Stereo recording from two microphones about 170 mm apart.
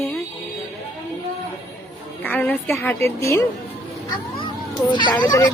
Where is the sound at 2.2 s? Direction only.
10° left (ahead or behind).